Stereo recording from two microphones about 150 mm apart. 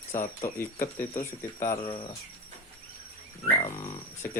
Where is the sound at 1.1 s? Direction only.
50° left (ahead or behind).